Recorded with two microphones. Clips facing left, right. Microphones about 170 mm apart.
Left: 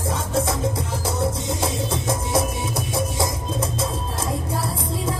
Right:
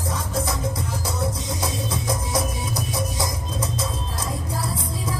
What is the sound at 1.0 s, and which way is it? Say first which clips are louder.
Music: left 4 dB; 25° left (ahead or behind).